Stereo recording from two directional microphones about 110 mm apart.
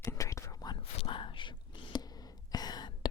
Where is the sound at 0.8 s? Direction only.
55° left (ahead or behind).